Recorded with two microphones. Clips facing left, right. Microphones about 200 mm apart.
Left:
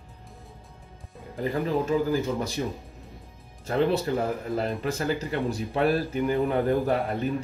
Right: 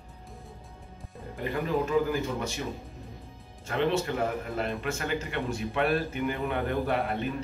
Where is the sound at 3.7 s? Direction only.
35° left (ahead or behind).